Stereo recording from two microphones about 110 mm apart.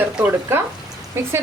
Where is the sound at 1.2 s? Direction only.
20° right (ahead or behind).